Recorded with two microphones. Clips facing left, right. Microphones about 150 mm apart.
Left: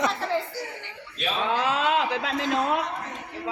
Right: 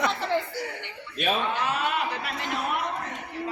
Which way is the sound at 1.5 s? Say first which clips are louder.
Left 4 dB; 90° left.